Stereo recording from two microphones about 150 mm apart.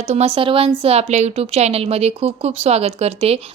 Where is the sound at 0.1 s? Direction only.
45° right (ahead or behind).